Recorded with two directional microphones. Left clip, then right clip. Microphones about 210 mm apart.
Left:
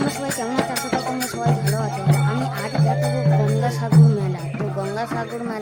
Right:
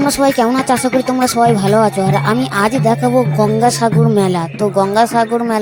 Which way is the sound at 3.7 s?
45° right (ahead or behind).